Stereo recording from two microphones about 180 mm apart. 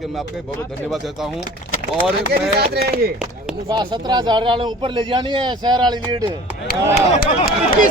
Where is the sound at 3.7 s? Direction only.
25° right (ahead or behind).